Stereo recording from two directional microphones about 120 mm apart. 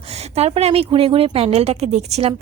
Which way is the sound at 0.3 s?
60° right (ahead or behind).